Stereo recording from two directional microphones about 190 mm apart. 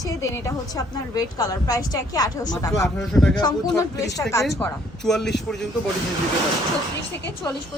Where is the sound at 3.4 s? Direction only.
20° left (ahead or behind).